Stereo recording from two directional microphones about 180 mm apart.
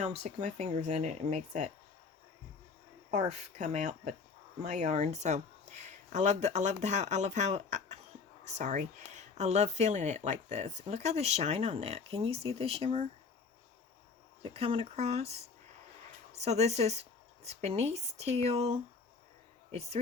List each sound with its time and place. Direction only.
0.0 s speech: 35° right (ahead or behind)
3.1 s speech: 40° right (ahead or behind)
14.4 s speech: 30° right (ahead or behind)